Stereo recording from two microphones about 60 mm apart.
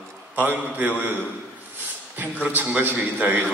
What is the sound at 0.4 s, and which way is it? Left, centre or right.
Speech, right.